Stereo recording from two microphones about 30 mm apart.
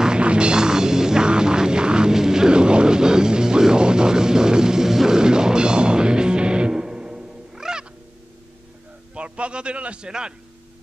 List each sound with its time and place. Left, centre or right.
0.2 s music: right
0.6 s music: right
2.5 s music: right
6.7 s music: right
9.1 s a sound: right
10.0 s a man's voice: right